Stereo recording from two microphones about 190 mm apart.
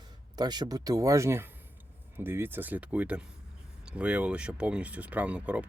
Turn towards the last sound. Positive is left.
turn(degrees=-5)  # may be behind; listen again after turning